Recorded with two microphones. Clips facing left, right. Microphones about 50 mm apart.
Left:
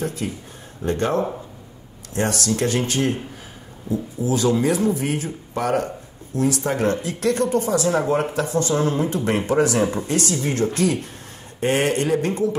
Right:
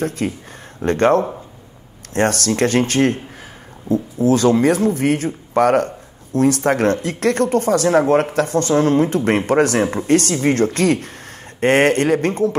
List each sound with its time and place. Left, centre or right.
0.0 s speech: right